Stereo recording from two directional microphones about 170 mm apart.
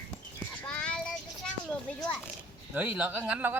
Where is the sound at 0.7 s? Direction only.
5° left (ahead or behind).